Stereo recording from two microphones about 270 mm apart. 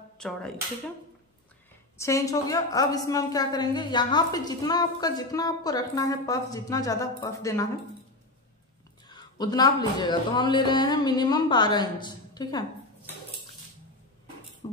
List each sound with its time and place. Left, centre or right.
2.0 s a woman's voice: centre
9.0 s a woman's voice: centre
14.6 s beatboxing: centre